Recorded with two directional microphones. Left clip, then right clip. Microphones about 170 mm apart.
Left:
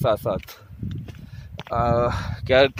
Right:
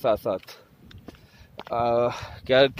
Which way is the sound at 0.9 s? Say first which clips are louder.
Left 5 dB; 10° left (ahead or behind).